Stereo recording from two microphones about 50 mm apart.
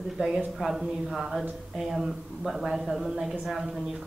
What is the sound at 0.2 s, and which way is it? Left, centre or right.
Speech, right.